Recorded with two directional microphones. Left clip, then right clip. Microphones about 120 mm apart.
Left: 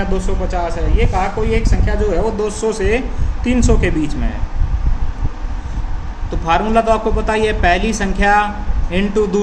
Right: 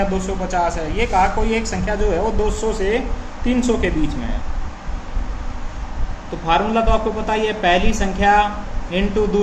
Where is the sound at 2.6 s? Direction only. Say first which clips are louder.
Left 3 dB; 60° left (ahead or behind).